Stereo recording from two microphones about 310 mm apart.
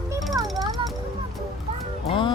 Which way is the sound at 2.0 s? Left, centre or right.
Centre.